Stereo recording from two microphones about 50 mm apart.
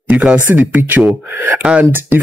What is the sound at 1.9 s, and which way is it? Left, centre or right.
Speech, right.